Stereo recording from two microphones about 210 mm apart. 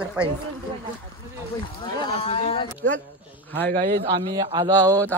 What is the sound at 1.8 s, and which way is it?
Speech, 25° left (ahead or behind).